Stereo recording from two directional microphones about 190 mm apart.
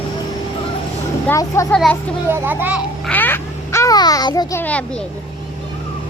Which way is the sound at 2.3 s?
10° right (ahead or behind).